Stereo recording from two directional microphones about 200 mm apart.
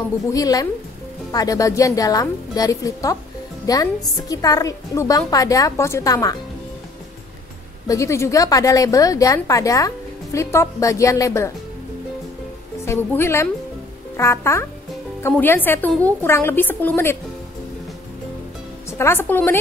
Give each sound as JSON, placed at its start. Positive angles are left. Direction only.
{"t": 0.3, "sound": "a woman's voice", "side_deg": 20}
{"t": 7.9, "sound": "a woman's voice", "side_deg": 15}
{"t": 12.8, "sound": "a woman's voice", "side_deg": 10}
{"t": 18.9, "sound": "a woman's voice", "side_deg": 15}